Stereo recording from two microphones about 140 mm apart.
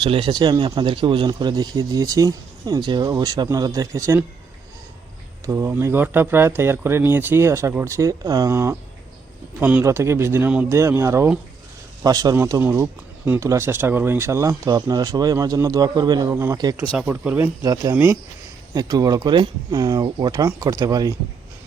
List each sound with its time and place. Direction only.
0.0 s speech: 40° right (ahead or behind)
5.5 s speech: 20° right (ahead or behind)
16.3 s speech: 15° right (ahead or behind)
17.6 s speech: 25° right (ahead or behind)
17.9 s speech: 15° right (ahead or behind)
18.7 s speech: 25° right (ahead or behind)